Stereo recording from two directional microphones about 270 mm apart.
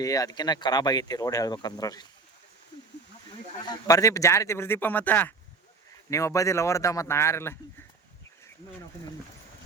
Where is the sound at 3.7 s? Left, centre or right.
Centre.